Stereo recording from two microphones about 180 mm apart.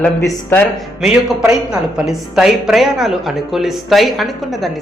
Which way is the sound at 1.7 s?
5° right (ahead or behind).